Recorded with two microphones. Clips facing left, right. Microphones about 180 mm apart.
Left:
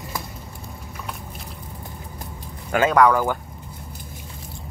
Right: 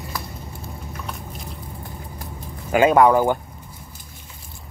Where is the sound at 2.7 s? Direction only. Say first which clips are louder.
Right 2 dB; 15° right (ahead or behind).